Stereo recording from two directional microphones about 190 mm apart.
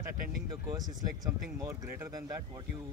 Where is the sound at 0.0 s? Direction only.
20° right (ahead or behind).